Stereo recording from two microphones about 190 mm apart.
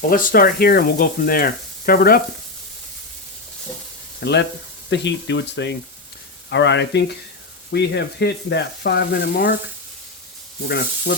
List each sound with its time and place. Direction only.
0.1 s speech: 50° left (ahead or behind)
4.2 s speech: 65° left (ahead or behind)
10.7 s speech: 60° left (ahead or behind)